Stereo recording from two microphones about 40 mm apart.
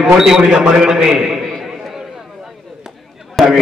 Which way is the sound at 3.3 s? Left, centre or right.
Centre.